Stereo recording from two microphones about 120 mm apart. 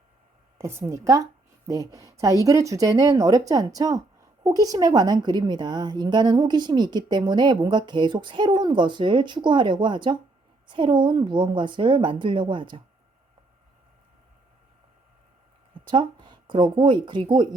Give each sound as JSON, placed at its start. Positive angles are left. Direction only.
{"t": 0.6, "sound": "a woman's voice", "side_deg": -25}
{"t": 15.9, "sound": "speech", "side_deg": -40}